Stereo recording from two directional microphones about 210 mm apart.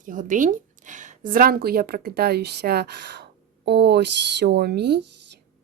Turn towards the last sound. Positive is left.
turn(degrees=-55)  # may be behind; listen again after turning